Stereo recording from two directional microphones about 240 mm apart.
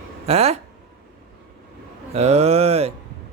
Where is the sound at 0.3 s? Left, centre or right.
Right.